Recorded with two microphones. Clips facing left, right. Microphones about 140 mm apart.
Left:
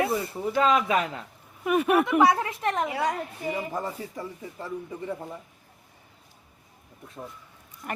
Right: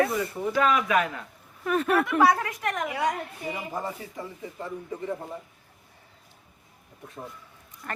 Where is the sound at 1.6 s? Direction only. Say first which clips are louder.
Left 2 dB; 10° left (ahead or behind); by 3.2 s 30° left (ahead or behind).